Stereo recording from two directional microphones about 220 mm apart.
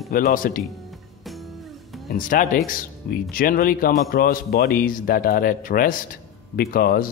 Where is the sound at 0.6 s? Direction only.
Centre (ahead or behind).